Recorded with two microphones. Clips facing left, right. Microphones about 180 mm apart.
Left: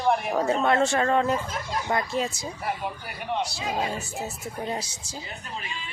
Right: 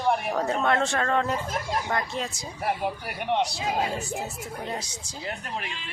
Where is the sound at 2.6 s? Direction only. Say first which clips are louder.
Right 4 dB; 60° right (ahead or behind).